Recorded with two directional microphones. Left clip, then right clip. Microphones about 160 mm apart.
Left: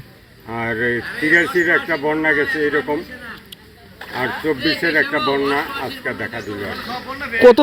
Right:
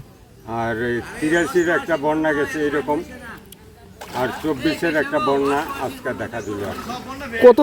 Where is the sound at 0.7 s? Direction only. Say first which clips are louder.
Left 4 dB; 15° left (ahead or behind).